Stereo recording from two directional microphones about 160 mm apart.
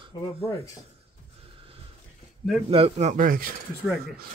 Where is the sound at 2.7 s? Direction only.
40° right (ahead or behind); by 3.5 s 60° right (ahead or behind).